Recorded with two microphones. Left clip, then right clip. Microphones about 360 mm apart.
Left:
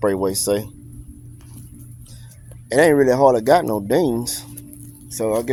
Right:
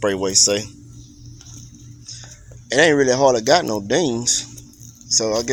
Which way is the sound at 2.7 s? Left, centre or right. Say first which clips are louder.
Left 1 dB; left.